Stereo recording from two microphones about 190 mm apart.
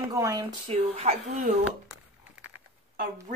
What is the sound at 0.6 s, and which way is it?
Speech, 30° right (ahead or behind).